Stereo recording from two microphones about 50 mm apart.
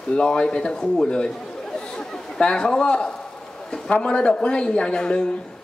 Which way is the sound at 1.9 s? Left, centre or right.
Centre.